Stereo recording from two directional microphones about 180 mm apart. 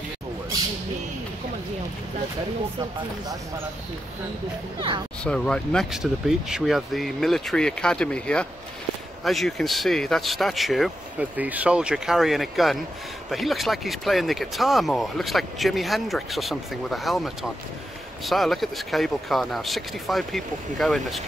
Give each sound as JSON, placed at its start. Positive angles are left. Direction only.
{"t": 4.7, "sound": "speech", "side_deg": -25}
{"t": 5.2, "sound": "speech", "side_deg": 5}